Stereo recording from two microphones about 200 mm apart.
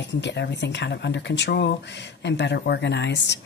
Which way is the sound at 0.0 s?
60° left (ahead or behind).